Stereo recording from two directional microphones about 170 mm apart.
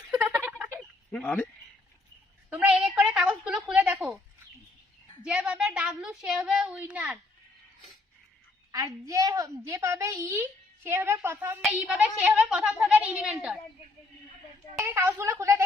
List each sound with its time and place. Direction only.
0.1 s a sound: 10° right (ahead or behind)
1.1 s speech: 10° left (ahead or behind)
2.5 s a woman's voice: 10° right (ahead or behind)
5.2 s a woman's voice: 5° right (ahead or behind)
8.7 s a woman's voice: 20° right (ahead or behind)
14.8 s a woman's voice: 10° right (ahead or behind)